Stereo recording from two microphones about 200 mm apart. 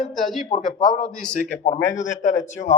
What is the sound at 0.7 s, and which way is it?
Speech, 20° left (ahead or behind).